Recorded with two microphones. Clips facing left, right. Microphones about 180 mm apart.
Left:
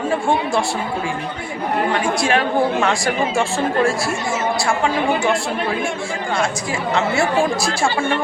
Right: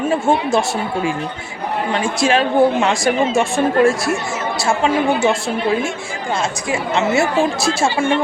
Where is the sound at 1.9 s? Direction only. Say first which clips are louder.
Right 4 dB; 20° right (ahead or behind).